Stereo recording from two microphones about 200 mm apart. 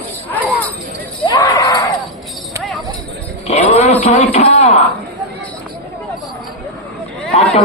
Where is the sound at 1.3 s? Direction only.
15° left (ahead or behind).